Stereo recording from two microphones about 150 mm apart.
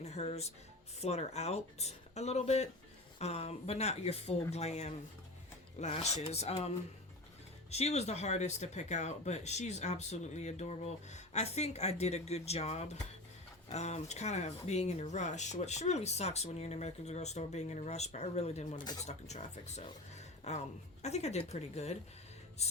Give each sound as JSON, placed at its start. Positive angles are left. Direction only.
{"t": 0.0, "sound": "music", "side_deg": 45}
{"t": 1.0, "sound": "speech", "side_deg": 45}
{"t": 18.8, "sound": "speech", "side_deg": 25}
{"t": 19.0, "sound": "speech", "side_deg": 50}